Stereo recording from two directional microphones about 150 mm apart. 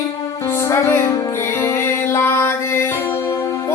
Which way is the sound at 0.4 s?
15° left (ahead or behind).